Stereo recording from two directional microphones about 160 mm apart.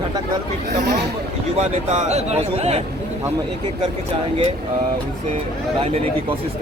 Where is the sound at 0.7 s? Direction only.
90° right.